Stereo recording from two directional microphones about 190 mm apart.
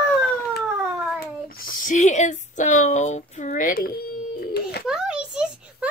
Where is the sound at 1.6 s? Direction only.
45° left (ahead or behind).